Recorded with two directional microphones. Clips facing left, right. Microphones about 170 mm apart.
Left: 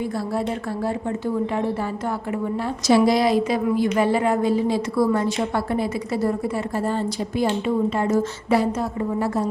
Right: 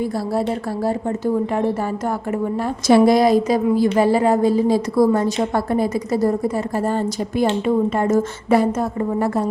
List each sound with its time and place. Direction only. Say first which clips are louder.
2.8 s a woman's voice: right 4 dB; 50° right (ahead or behind)